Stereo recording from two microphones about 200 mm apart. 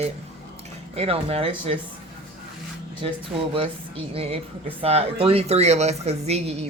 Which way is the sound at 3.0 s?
25° right (ahead or behind).